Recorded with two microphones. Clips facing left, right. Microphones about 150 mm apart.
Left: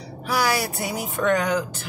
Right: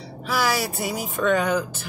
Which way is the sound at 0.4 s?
Centre (ahead or behind).